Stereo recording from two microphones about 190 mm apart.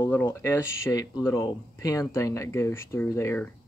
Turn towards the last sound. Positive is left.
turn(degrees=15)  # may be behind; listen again after turning